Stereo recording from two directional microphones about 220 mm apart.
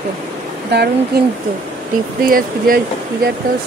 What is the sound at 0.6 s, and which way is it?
Speech, 50° right (ahead or behind).